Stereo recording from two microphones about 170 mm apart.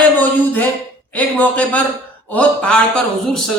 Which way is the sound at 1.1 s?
10° left (ahead or behind).